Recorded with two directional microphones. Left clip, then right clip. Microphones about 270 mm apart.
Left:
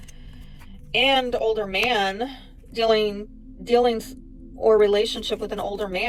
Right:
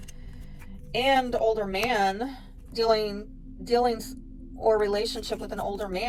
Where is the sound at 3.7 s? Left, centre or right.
Left.